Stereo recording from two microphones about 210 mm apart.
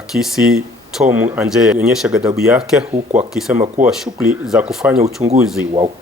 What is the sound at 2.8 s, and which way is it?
Speech, 30° right (ahead or behind).